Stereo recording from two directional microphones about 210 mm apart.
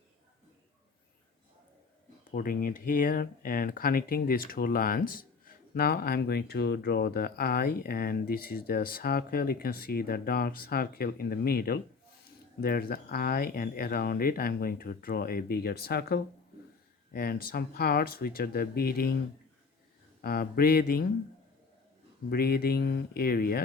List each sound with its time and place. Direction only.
2.3 s speech: 45° left (ahead or behind)
20.2 s speech: 45° left (ahead or behind)
22.3 s speech: 45° left (ahead or behind)